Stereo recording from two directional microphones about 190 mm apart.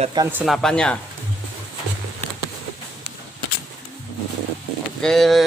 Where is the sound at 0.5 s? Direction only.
5° left (ahead or behind).